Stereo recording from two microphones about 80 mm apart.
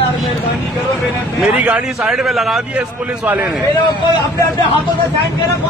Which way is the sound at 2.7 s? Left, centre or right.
Centre.